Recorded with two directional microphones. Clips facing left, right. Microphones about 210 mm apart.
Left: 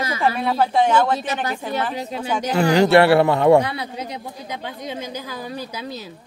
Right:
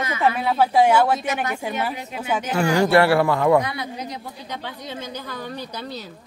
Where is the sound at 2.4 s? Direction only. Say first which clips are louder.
Left 4 dB; 35° left (ahead or behind).